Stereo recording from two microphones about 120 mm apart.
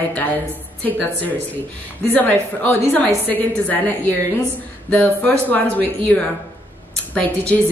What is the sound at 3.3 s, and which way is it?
A woman's voice, 15° left (ahead or behind).